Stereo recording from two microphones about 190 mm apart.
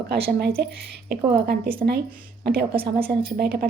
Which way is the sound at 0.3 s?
55° right (ahead or behind).